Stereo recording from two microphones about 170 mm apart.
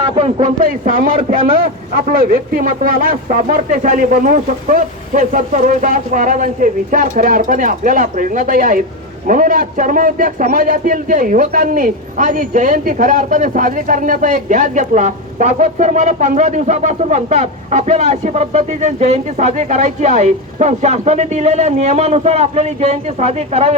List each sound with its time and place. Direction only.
0.0 s a man's voice: 35° right (ahead or behind)
0.6 s a man's voice: 55° right (ahead or behind); by 23.7 s 40° right (ahead or behind)